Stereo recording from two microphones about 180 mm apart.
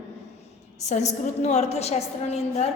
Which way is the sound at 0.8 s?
40° left (ahead or behind).